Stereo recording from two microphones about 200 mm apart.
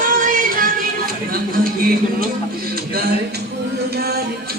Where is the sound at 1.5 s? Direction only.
45° right (ahead or behind).